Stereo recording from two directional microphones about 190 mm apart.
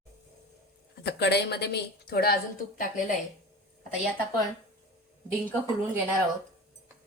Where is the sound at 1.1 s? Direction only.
60° left (ahead or behind).